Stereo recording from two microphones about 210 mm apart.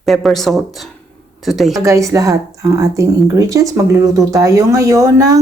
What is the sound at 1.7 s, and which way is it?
Speech, 15° right (ahead or behind).